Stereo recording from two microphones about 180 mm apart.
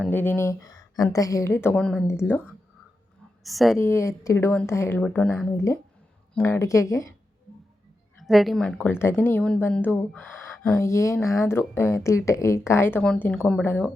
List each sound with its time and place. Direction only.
0.1 s speech: 10° left (ahead or behind)
3.4 s speech: centre (ahead or behind)
3.8 s speech: 15° left (ahead or behind)
8.2 s speech: centre (ahead or behind)
10.8 s speech: 15° left (ahead or behind)